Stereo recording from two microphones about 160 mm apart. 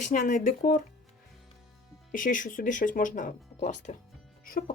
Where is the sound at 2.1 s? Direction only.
55° left (ahead or behind).